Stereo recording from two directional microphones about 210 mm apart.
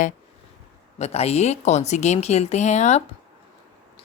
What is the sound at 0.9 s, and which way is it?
Speech, 30° left (ahead or behind).